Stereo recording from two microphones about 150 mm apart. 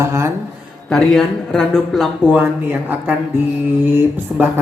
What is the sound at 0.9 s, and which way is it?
Speech, centre (ahead or behind).